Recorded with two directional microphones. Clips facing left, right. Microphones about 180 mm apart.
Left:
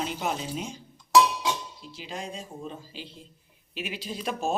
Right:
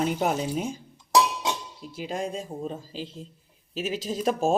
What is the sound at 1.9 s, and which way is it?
Speech, 50° right (ahead or behind).